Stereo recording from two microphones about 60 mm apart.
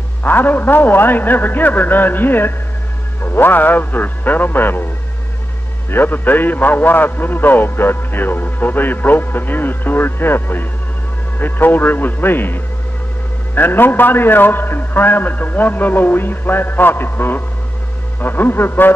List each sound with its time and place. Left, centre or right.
0.2 s a man's voice: left
5.9 s a man's voice: left